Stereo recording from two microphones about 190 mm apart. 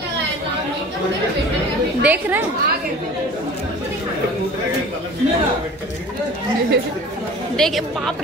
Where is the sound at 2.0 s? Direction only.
10° right (ahead or behind).